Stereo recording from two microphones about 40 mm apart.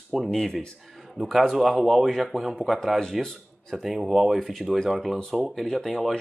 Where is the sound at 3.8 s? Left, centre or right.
Centre.